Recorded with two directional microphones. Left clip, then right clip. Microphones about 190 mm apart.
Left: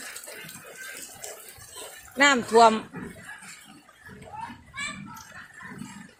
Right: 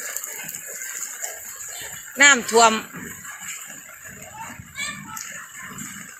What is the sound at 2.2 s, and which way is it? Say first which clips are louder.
Speech: right 3 dB; 15° left (ahead or behind).